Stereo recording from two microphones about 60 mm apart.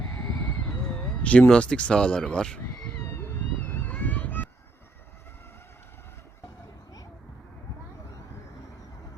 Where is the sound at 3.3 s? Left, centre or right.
Left.